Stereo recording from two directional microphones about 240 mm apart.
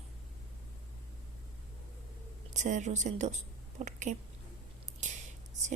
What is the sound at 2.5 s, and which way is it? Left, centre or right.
Speech, right.